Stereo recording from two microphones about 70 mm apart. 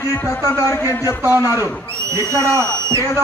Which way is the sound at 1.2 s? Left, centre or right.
Right.